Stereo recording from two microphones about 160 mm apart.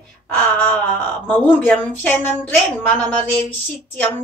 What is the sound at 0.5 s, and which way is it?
A woman's voice, 10° left (ahead or behind).